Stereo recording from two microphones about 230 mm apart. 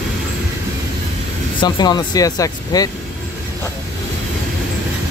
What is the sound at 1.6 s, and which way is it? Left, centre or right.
Speech, centre.